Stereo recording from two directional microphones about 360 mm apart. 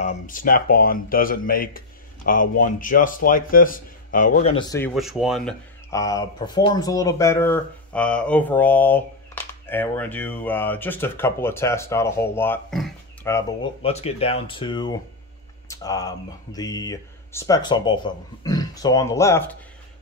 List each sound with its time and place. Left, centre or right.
0.0 s a man's voice: left; by 13.4 s centre
13.8 s a man's voice: centre